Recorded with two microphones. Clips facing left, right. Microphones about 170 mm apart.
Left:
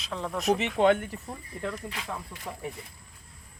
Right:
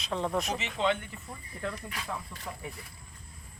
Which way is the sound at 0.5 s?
55° left (ahead or behind).